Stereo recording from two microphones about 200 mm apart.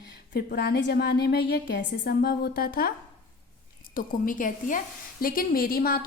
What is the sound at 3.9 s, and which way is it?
A woman's voice, 45° left (ahead or behind).